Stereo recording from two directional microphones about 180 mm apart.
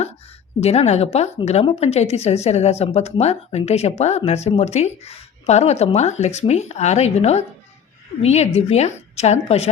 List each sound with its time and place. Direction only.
0.6 s speech: 35° left (ahead or behind)